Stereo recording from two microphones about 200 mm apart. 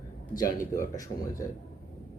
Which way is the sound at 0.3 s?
15° left (ahead or behind).